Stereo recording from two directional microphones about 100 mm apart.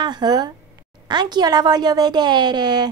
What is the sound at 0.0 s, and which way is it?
A woman's voice, 45° right (ahead or behind).